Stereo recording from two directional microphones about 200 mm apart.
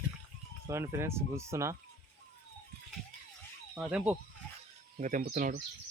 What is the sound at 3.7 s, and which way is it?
Speech, 5° right (ahead or behind).